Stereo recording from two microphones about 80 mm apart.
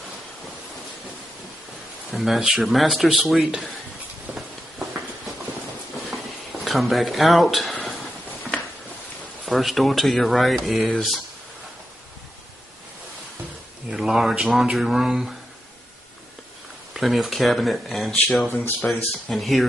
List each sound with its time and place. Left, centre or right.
2.0 s speech: centre
4.4 s a sound: centre
6.6 s speech: centre
7.7 s a sound: centre
9.5 s speech: centre
13.8 s speech: centre
16.9 s speech: centre
18.5 s speech: left
18.9 s speech: centre